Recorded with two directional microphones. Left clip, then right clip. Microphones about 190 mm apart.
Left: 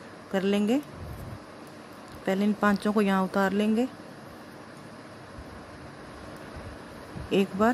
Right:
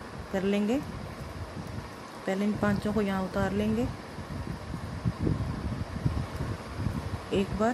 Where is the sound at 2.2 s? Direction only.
20° left (ahead or behind).